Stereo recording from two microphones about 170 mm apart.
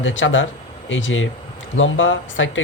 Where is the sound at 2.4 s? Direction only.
90° left.